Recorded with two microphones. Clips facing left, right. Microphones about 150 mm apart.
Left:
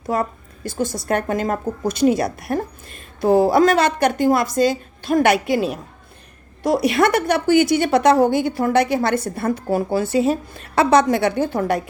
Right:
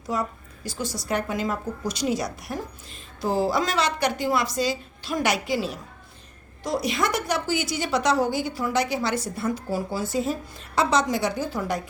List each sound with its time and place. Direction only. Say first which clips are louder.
0.1 s a woman's voice: left 6 dB; 55° left (ahead or behind)